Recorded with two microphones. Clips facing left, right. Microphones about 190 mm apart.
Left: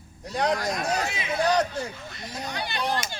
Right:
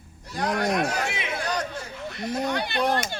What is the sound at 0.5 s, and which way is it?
Speech, 65° right (ahead or behind).